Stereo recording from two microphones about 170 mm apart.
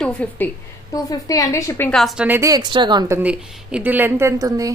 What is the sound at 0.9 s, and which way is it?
Speech, 20° left (ahead or behind).